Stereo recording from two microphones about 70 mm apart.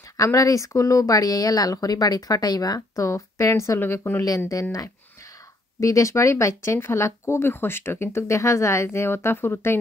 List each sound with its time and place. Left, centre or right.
0.2 s speech: left
3.8 s speech: left
5.8 s speech: left